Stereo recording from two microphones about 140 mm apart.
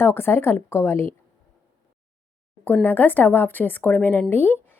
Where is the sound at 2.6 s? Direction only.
15° left (ahead or behind).